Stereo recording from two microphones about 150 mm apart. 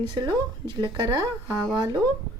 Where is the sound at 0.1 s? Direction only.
30° right (ahead or behind).